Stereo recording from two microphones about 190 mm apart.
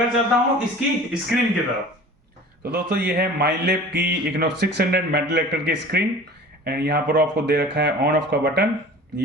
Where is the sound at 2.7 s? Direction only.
55° right (ahead or behind).